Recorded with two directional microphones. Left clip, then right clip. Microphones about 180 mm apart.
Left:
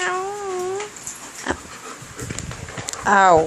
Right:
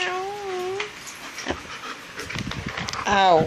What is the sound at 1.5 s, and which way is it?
Dog, 15° left (ahead or behind).